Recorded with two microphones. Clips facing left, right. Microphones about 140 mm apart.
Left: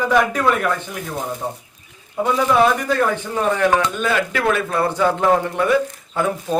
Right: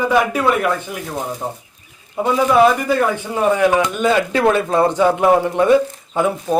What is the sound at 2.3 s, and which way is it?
Speech, 5° right (ahead or behind).